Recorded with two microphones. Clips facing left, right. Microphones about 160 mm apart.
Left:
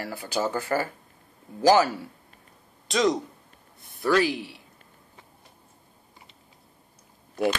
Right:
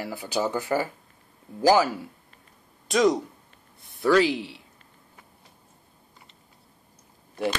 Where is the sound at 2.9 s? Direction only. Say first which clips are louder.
Right 2 dB; 10° right (ahead or behind).